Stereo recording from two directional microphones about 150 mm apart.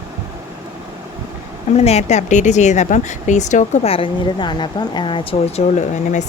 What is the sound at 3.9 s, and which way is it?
Speech, 35° left (ahead or behind).